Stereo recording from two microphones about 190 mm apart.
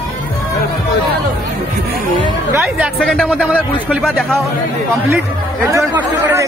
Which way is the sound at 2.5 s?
5° right (ahead or behind).